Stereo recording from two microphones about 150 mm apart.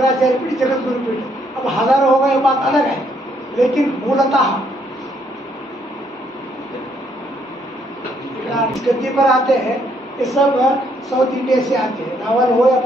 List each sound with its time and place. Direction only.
0.1 s a woman's voice: centre (ahead or behind)
8.5 s a woman's voice: centre (ahead or behind)